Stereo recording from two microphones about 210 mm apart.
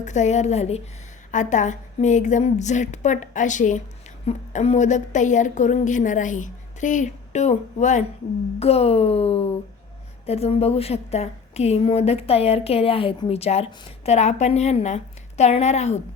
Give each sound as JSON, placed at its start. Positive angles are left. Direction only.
{"t": 0.0, "sound": "a woman's voice", "side_deg": 35}